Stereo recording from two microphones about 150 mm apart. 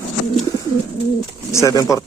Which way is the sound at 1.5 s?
20° left (ahead or behind).